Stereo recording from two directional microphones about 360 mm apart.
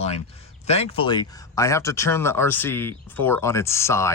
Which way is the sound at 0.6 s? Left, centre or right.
Centre.